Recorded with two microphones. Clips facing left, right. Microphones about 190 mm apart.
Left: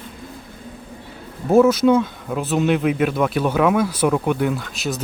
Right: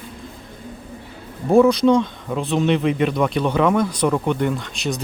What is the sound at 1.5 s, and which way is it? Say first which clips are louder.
Speech: even; 5° left (ahead or behind).